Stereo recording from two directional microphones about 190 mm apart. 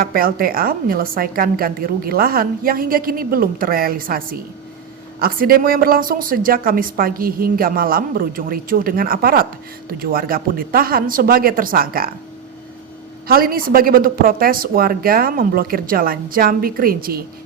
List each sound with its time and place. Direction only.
0.0 s a woman's voice: 50° right (ahead or behind)
13.2 s a woman's voice: 50° right (ahead or behind)